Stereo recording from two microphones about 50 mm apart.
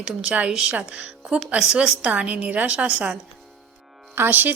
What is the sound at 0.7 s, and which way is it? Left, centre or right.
A woman's voice, right.